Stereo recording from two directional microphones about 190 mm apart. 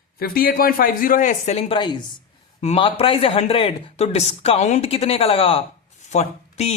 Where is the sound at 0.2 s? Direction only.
50° left (ahead or behind).